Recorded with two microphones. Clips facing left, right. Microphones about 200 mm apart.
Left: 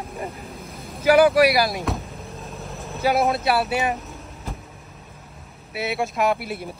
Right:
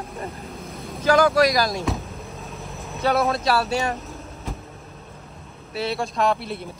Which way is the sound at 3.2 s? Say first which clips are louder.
Left 1 dB; 15° left (ahead or behind).